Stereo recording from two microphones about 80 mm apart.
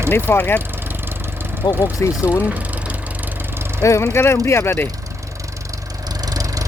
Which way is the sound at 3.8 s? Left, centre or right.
Left.